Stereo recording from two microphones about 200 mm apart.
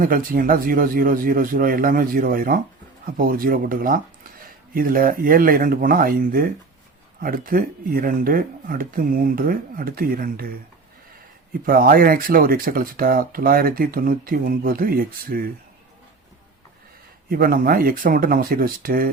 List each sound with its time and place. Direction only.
0.0 s speech: 45° right (ahead or behind)
11.6 s speech: 45° right (ahead or behind)
17.2 s speech: 45° right (ahead or behind)